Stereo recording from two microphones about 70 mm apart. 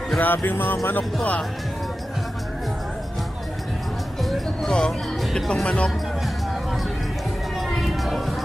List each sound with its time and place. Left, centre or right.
0.2 s music: left
4.2 s music: centre
5.7 s speech: centre
7.7 s a sound: centre